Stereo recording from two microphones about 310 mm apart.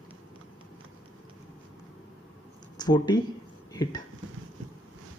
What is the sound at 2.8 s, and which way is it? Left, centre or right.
Speech, centre.